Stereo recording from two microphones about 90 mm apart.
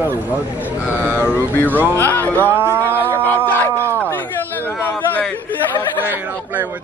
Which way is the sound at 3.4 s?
20° left (ahead or behind).